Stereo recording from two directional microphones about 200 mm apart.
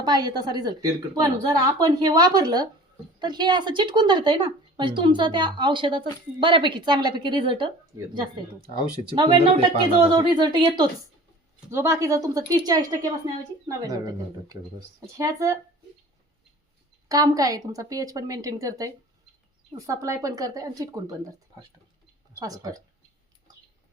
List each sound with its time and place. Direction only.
0.0 s a woman's voice: 20° right (ahead or behind)
9.0 s a woman's voice: 25° right (ahead or behind)
15.0 s speech: 15° right (ahead or behind)
17.1 s speech: 15° right (ahead or behind)
22.4 s speech: 20° right (ahead or behind)